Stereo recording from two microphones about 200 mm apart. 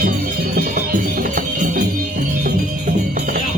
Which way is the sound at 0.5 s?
45° right (ahead or behind).